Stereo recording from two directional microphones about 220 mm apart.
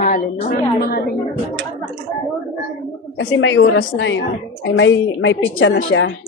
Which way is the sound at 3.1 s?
60° left (ahead or behind).